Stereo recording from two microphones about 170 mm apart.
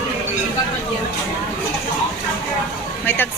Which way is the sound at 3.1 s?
10° left (ahead or behind).